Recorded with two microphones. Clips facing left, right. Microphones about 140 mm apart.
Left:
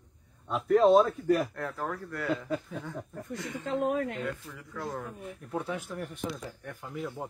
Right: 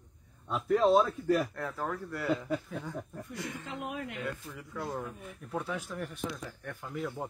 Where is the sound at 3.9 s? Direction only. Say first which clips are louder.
Left 7 dB; 45° left (ahead or behind).